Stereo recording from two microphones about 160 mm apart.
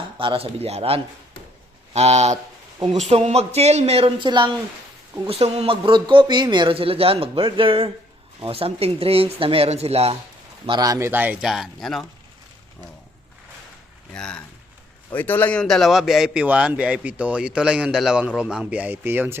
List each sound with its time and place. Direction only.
0.2 s speech: 35° right (ahead or behind)
10.7 s speech: 25° right (ahead or behind); by 12.0 s centre (ahead or behind)
14.1 s a man's voice: 5° left (ahead or behind); by 19.4 s 15° right (ahead or behind)